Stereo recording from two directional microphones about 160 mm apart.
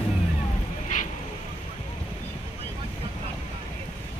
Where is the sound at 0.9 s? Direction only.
55° left (ahead or behind).